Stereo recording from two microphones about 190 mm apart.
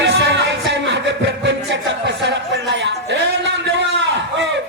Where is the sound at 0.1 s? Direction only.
70° right (ahead or behind).